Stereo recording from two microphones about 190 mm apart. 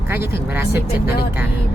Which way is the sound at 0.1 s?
10° right (ahead or behind).